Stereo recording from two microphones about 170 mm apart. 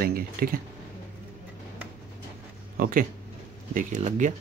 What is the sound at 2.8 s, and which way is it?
Speech, 55° right (ahead or behind).